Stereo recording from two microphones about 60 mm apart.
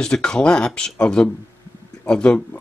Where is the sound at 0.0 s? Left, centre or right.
Centre.